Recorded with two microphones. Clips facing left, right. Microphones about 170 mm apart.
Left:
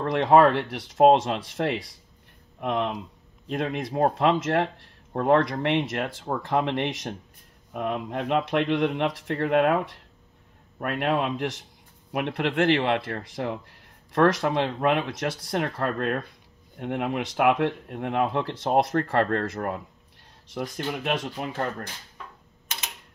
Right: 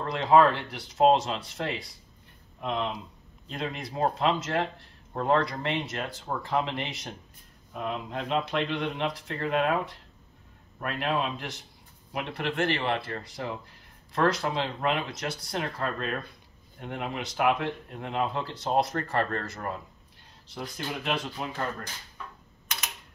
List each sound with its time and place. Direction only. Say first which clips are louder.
0.0 s speech: left 3 dB; 65° left (ahead or behind)
10.8 s speech: left 4 dB; 60° left (ahead or behind)